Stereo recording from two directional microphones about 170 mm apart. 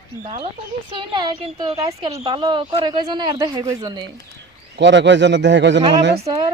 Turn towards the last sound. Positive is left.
turn(degrees=-40)  # may be behind; listen again after turning